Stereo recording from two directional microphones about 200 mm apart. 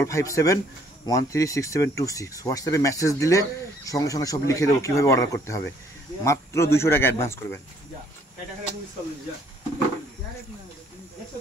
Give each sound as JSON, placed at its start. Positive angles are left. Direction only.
{"t": 0.0, "sound": "speech", "side_deg": 15}